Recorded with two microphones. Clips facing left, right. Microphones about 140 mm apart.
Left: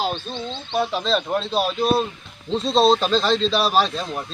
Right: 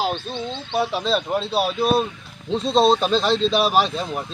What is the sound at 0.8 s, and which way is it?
Speech, 5° right (ahead or behind).